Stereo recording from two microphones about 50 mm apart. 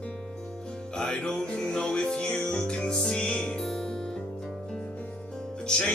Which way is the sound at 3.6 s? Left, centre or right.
Centre.